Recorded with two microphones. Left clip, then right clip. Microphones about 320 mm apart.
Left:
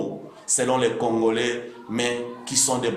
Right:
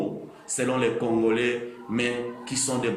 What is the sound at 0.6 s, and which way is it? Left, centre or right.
Speech, left.